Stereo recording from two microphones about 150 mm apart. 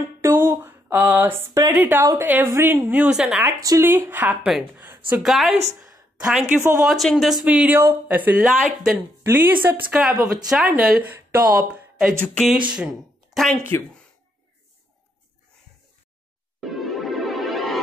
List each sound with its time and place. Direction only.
0.2 s speech: 15° right (ahead or behind)
3.6 s speech: 20° right (ahead or behind)
5.1 s a woman's voice: centre (ahead or behind)
6.4 s speech: 15° right (ahead or behind)
6.8 s speech: centre (ahead or behind)
7.4 s speech: 10° right (ahead or behind)
9.3 s speech: 15° right (ahead or behind)
13.7 s speech: 15° left (ahead or behind)
16.6 s music: centre (ahead or behind)